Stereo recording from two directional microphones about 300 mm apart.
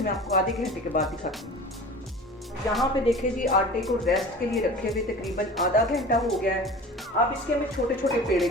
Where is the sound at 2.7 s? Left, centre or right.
Centre.